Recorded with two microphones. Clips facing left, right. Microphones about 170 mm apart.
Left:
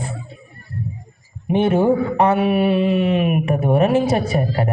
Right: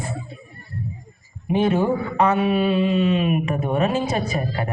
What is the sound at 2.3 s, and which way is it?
Mantra, 60° left (ahead or behind).